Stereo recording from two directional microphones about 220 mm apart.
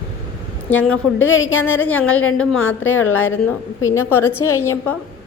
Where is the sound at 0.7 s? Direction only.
5° left (ahead or behind).